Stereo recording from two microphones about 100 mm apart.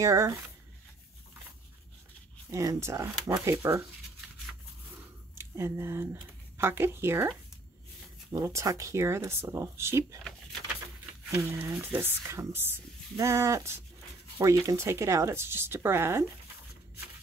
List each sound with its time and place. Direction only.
0.0 s speech: 30° right (ahead or behind)
2.5 s speech: 35° right (ahead or behind)
4.9 s a sound: 25° right (ahead or behind)
6.6 s speech: 25° right (ahead or behind)
8.3 s speech: 30° right (ahead or behind)
11.2 s speech: 25° right (ahead or behind)